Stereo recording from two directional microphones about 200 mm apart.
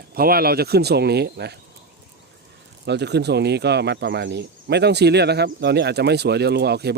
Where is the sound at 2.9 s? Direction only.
55° right (ahead or behind).